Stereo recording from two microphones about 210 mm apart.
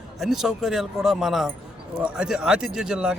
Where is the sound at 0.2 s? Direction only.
Centre (ahead or behind).